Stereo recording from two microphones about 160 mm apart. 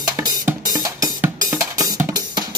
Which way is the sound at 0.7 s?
20° right (ahead or behind).